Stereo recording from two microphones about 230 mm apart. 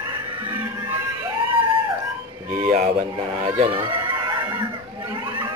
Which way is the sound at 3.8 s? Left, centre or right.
Right.